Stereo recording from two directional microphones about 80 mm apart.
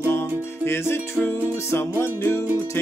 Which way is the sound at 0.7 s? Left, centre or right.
Left.